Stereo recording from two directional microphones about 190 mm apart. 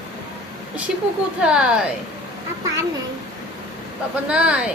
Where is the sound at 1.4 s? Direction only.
5° right (ahead or behind).